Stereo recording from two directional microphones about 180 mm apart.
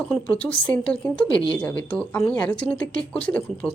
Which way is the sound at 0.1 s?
5° left (ahead or behind).